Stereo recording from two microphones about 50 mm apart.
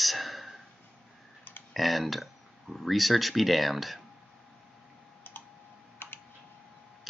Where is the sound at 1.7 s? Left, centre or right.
Centre.